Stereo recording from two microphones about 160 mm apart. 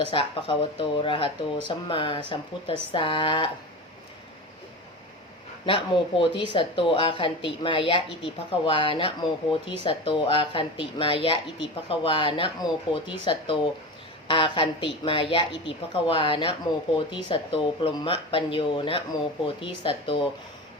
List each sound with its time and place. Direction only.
0.1 s speech: 35° left (ahead or behind)
5.6 s speech: 35° left (ahead or behind)